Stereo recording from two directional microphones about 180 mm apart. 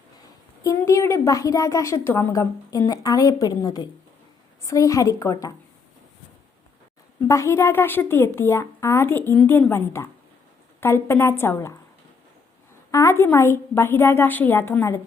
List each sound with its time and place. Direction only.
0.6 s a woman's voice: 15° left (ahead or behind)
7.2 s a woman's voice: 15° left (ahead or behind)
12.9 s a woman's voice: 15° left (ahead or behind)